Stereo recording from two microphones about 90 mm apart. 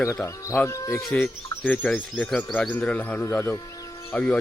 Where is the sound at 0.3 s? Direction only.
30° left (ahead or behind).